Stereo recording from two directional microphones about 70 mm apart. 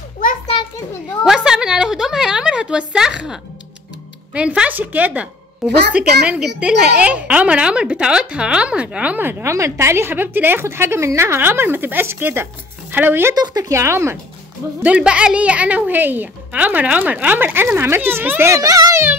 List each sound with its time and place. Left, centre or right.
1.2 s a sound: centre
4.3 s a woman's voice: centre
9.2 s a woman's voice: right
13.3 s speech: right
13.7 s a woman's voice: right
14.8 s a woman's voice: centre
18.5 s a child's voice: right